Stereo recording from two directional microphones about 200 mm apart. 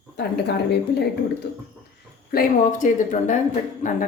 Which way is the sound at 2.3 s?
40° left (ahead or behind).